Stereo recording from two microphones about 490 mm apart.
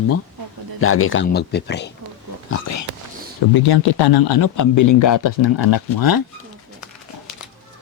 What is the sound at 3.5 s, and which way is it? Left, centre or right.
Speech, left.